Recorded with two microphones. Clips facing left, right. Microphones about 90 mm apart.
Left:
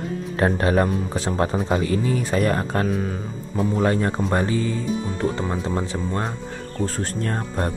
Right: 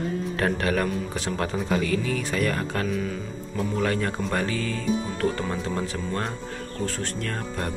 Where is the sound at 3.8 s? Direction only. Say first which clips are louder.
Left 4 dB; 30° left (ahead or behind).